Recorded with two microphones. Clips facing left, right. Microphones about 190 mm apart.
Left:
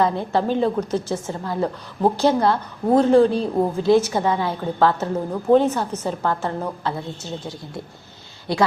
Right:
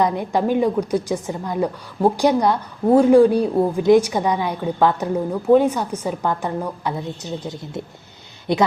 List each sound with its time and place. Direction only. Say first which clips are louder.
0.0 s a woman's voice: right 1 dB; 15° right (ahead or behind)